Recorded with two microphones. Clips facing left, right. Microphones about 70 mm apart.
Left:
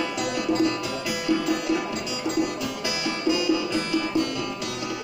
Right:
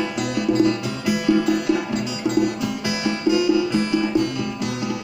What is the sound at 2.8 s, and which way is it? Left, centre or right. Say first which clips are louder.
Music: right 4 dB; right.